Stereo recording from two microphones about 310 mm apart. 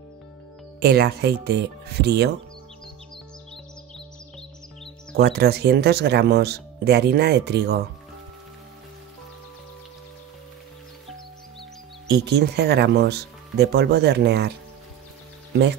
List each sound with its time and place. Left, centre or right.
0.7 s speech: right
5.1 s speech: right
12.1 s speech: right